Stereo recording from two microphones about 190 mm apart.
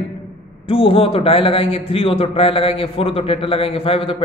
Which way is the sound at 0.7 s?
30° left (ahead or behind).